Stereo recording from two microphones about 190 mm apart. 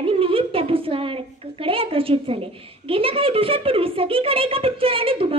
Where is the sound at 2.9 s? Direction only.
30° right (ahead or behind).